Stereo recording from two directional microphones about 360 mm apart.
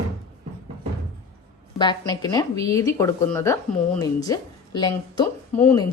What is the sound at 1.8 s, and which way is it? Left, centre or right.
Speech, centre.